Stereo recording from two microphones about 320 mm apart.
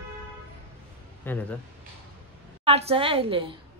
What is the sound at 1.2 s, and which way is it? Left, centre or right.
Speech, centre.